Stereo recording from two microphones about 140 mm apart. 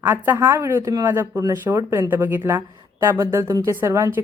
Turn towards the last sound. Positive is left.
turn(degrees=-20)  # may be behind; listen again after turning